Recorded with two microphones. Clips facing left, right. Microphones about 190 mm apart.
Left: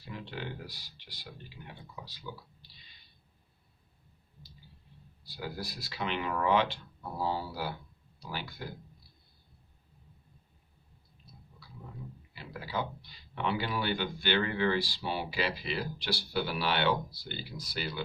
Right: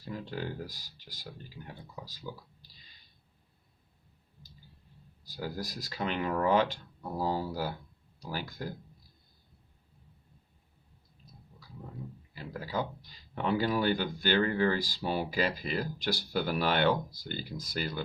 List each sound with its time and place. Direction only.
0.0 s speech: 40° right (ahead or behind)
5.3 s speech: 40° right (ahead or behind)
12.3 s speech: 40° right (ahead or behind)